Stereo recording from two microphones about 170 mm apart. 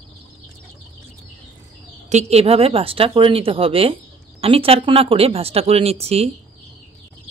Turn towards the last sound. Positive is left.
turn(degrees=-35)  # may be behind; listen again after turning